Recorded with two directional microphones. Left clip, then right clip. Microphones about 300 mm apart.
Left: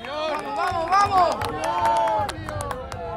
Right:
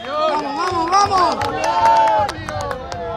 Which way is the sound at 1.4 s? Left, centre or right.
Right.